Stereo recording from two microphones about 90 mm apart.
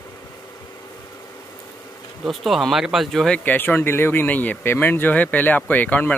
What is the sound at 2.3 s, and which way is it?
Speech, centre (ahead or behind).